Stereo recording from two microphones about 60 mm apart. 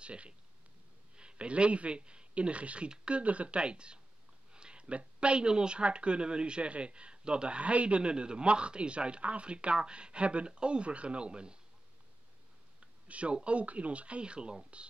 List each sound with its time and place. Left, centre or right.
0.0 s a man's voice: centre
12.8 s a man's voice: centre